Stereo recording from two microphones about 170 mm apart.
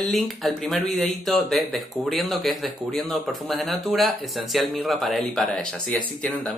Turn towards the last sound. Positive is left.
turn(degrees=0)  # may be behind; listen again after turning